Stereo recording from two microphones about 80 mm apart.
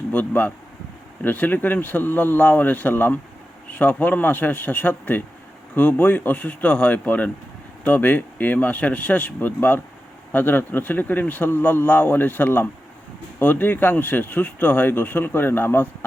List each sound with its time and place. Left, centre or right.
0.1 s speech: left